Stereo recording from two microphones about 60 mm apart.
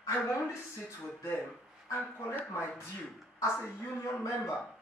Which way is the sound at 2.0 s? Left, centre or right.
Left.